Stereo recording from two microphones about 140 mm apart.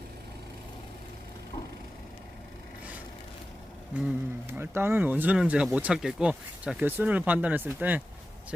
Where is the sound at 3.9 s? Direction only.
10° right (ahead or behind).